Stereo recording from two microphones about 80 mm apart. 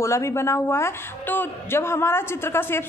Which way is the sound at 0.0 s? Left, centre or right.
Left.